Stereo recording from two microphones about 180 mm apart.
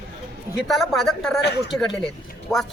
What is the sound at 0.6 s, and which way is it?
Speech, centre (ahead or behind).